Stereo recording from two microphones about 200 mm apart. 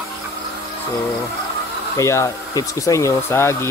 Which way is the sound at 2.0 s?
15° left (ahead or behind).